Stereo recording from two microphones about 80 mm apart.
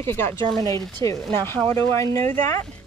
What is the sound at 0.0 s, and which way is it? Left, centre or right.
Speech, left.